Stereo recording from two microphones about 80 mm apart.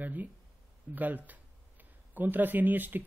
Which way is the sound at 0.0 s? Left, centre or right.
Right.